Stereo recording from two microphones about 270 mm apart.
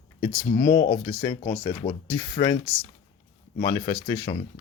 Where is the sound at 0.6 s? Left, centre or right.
Centre.